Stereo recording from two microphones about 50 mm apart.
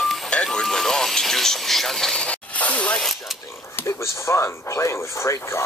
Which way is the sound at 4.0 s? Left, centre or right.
Left.